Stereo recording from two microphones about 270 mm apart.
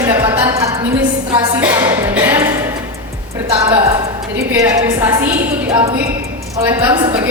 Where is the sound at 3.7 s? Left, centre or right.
Centre.